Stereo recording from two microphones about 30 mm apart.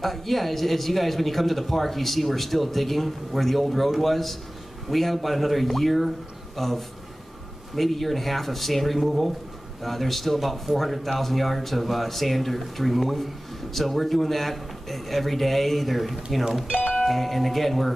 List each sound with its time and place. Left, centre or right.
0.0 s speech: centre
16.7 s music: left
17.0 s speech: centre